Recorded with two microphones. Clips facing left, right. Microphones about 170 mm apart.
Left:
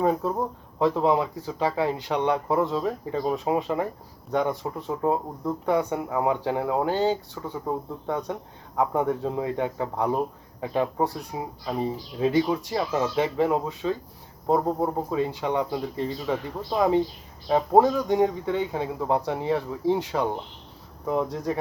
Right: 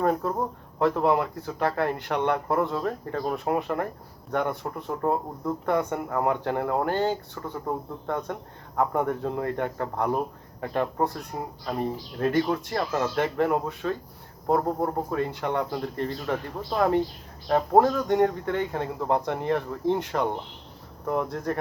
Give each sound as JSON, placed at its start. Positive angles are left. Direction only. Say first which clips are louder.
{"t": 0.0, "sound": "speech", "louder": "left 1 dB", "side_deg": 5}